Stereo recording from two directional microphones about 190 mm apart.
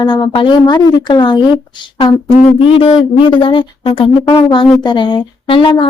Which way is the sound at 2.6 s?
25° left (ahead or behind).